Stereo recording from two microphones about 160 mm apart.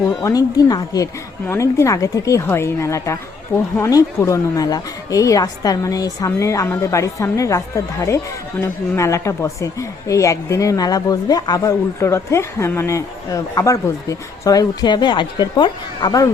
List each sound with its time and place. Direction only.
0.2 s a woman's voice: 20° left (ahead or behind)